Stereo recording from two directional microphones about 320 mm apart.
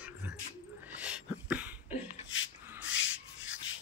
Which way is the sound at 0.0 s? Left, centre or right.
Centre.